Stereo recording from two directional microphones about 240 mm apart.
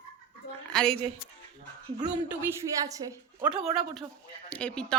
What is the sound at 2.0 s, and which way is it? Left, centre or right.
A woman's voice, centre.